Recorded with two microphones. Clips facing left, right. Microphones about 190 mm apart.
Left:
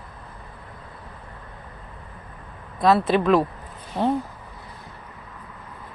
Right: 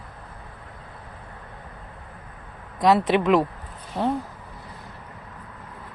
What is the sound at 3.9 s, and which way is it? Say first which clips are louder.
Speech: left 2 dB; 15° left (ahead or behind).